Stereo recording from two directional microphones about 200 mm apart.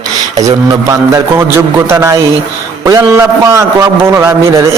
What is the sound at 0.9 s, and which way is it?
A man's voice, 15° right (ahead or behind).